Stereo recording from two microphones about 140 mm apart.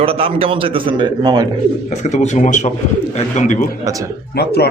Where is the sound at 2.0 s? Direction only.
55° left (ahead or behind).